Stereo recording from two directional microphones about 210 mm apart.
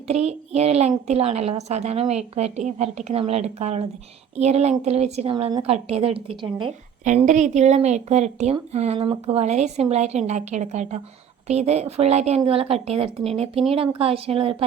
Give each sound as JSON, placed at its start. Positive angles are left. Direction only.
{"t": 0.1, "sound": "speech", "side_deg": -30}
{"t": 7.0, "sound": "speech", "side_deg": -35}